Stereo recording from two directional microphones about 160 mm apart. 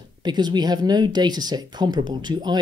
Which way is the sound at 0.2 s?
25° right (ahead or behind).